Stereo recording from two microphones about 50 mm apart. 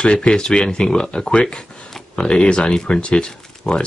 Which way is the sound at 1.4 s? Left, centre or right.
Centre.